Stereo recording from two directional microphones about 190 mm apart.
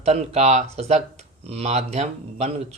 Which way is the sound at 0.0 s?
35° right (ahead or behind).